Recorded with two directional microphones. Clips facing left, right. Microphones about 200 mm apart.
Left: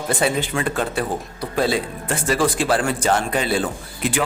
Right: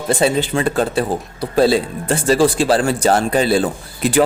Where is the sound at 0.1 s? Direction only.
30° right (ahead or behind).